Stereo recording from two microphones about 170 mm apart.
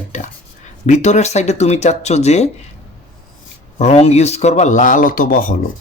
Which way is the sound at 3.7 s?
40° left (ahead or behind).